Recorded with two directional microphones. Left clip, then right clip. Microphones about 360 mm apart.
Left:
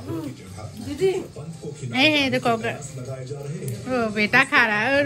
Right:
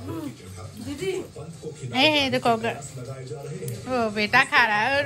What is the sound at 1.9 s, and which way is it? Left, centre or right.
Speech, centre.